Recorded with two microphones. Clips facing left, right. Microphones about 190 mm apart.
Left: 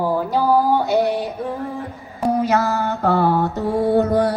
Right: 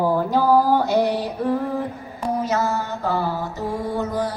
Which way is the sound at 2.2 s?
60° left (ahead or behind).